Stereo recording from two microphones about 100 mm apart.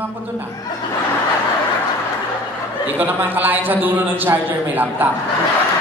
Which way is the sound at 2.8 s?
20° right (ahead or behind).